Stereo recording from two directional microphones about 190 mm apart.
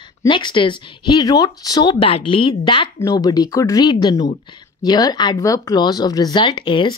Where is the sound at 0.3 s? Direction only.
25° left (ahead or behind).